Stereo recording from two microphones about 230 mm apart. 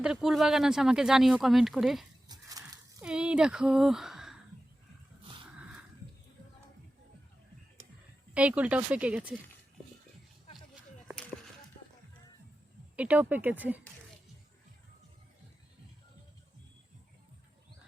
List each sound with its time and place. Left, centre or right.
0.0 s speech: centre
2.2 s a sound: centre
3.0 s speech: centre
8.3 s speech: centre
13.0 s speech: centre